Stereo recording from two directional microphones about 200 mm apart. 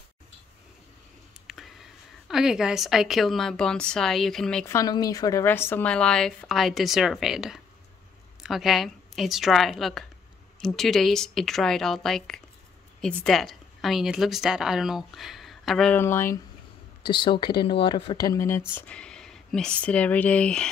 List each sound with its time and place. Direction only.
1.5 s speech: centre (ahead or behind)
4.6 s a woman's voice: 15° left (ahead or behind)
17.1 s speech: 25° left (ahead or behind); by 20.6 s 5° left (ahead or behind)